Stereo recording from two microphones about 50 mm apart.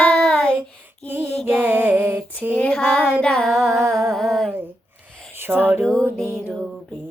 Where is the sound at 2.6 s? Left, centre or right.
Left.